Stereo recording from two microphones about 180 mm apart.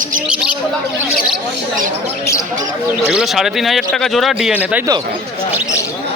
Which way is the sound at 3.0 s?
Centre (ahead or behind).